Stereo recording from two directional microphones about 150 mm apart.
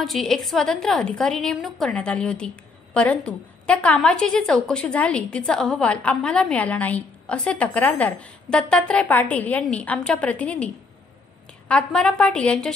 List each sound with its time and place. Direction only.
0.0 s a woman's voice: centre (ahead or behind)